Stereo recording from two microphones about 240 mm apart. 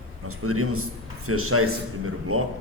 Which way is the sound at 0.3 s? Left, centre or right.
Right.